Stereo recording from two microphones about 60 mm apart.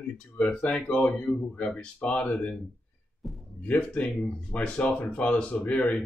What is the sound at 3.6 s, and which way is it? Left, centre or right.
Speech, left.